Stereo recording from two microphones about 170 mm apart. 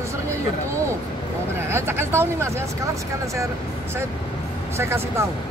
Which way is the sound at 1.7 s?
15° right (ahead or behind).